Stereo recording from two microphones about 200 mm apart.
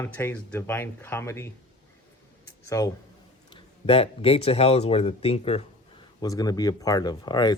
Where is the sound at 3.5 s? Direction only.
25° left (ahead or behind).